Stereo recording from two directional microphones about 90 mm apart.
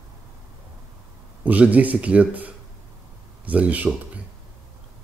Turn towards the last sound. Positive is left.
turn(degrees=-15)  # may be behind; listen again after turning